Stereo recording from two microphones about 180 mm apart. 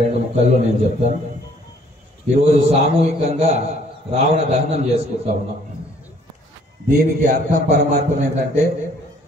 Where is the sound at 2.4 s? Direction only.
35° right (ahead or behind).